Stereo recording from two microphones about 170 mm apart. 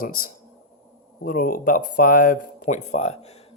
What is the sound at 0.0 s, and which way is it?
Speech, 55° left (ahead or behind).